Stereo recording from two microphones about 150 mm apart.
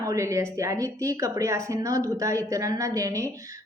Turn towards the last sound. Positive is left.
turn(degrees=-20)  # may be behind; listen again after turning